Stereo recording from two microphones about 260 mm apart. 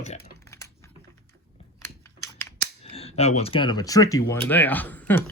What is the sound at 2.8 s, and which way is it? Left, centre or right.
Speech, left.